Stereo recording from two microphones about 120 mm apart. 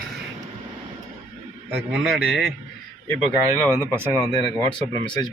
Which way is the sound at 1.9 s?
Centre (ahead or behind).